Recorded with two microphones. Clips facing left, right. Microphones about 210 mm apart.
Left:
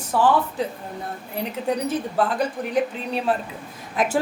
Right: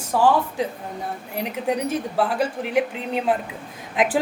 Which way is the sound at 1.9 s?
10° right (ahead or behind).